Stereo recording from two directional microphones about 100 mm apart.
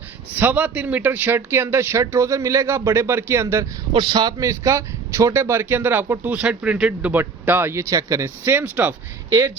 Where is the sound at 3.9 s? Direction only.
50° right (ahead or behind).